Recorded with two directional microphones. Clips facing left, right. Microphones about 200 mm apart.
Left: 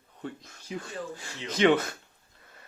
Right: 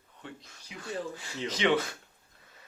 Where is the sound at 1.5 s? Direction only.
50° left (ahead or behind).